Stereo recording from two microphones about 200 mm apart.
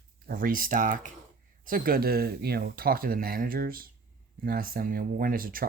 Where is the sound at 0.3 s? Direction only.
45° right (ahead or behind).